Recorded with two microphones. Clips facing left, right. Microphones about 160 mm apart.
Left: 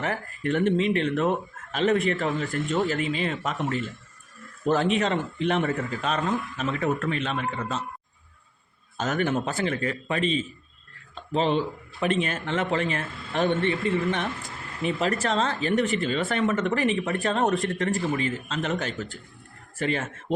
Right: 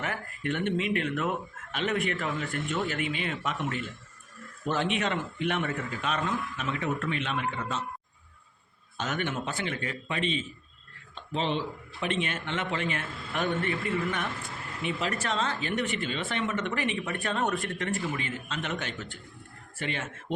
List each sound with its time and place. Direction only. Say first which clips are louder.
0.0 s speech: left 5 dB; 35° left (ahead or behind)
6.7 s speech: left 4 dB; 45° left (ahead or behind)
9.0 s speech: left 6 dB; 40° left (ahead or behind)
13.1 s a man's voice: left 1 dB; centre (ahead or behind)
13.3 s a man's voice: left 6 dB; 25° left (ahead or behind)
14.3 s speech: left 3 dB; centre (ahead or behind)
14.9 s a man's voice: left 6 dB; 45° left (ahead or behind)